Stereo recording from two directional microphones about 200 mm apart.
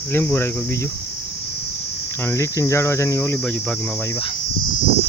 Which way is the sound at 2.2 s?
15° left (ahead or behind).